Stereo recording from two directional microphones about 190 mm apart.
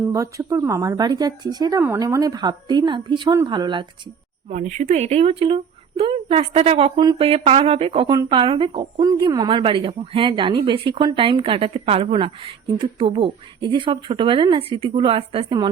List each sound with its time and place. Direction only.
0.0 s speech: 15° right (ahead or behind)
4.4 s speech: 40° right (ahead or behind); by 15.7 s 25° right (ahead or behind)